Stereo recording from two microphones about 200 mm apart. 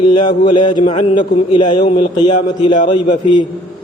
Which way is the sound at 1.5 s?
25° left (ahead or behind).